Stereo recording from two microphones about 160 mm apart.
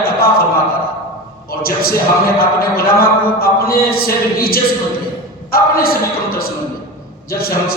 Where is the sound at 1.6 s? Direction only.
70° left (ahead or behind).